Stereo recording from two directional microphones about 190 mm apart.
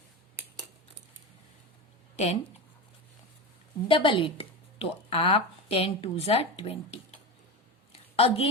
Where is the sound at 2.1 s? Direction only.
35° left (ahead or behind).